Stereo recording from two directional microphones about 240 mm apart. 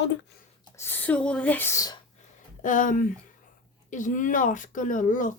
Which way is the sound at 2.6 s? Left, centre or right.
Left.